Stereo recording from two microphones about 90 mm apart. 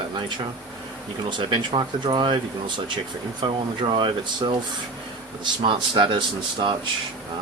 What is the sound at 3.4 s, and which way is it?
Speech, 60° right (ahead or behind).